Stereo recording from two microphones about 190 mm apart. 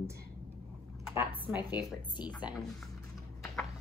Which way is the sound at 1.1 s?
10° right (ahead or behind).